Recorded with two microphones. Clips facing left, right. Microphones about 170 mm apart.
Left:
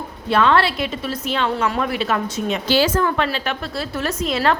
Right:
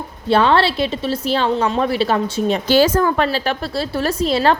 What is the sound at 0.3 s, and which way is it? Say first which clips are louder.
Speech: right 2 dB; 30° right (ahead or behind).